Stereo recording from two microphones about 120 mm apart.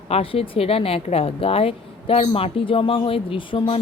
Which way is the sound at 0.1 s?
50° left (ahead or behind).